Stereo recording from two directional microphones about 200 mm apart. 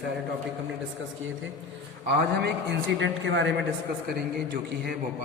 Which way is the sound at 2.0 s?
55° right (ahead or behind).